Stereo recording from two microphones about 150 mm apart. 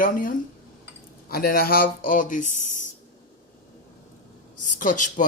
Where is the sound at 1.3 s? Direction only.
85° left; by 2.8 s 60° left (ahead or behind).